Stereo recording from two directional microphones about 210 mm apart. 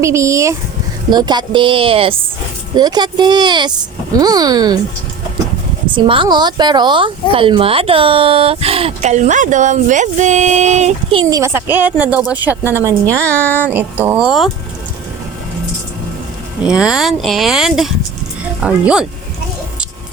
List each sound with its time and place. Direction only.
0.0 s speech: 15° right (ahead or behind)
5.9 s speech: 25° right (ahead or behind); by 14.5 s centre (ahead or behind)
16.6 s speech: 5° right (ahead or behind)